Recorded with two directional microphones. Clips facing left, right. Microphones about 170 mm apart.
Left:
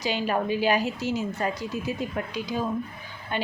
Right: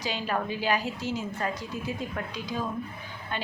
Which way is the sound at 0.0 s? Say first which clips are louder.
Left 4 dB; 15° left (ahead or behind).